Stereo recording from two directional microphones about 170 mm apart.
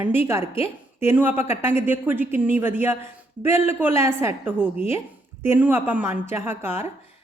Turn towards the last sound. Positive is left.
turn(degrees=-15)  # may be behind; listen again after turning